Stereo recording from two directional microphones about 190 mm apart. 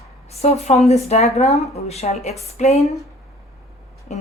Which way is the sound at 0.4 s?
35° left (ahead or behind).